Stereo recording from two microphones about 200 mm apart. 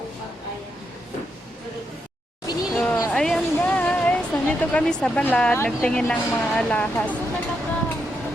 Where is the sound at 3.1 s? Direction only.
Centre (ahead or behind).